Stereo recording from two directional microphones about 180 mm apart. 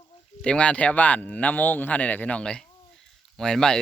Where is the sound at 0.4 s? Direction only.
5° left (ahead or behind).